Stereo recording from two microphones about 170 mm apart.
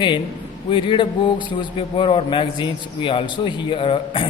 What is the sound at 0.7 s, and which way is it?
A man's voice, 30° left (ahead or behind).